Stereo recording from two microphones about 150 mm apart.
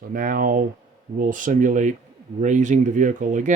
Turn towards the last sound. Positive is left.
turn(degrees=-55)  # may be behind; listen again after turning